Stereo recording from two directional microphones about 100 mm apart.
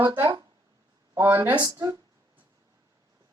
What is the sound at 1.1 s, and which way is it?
Speech, 25° right (ahead or behind).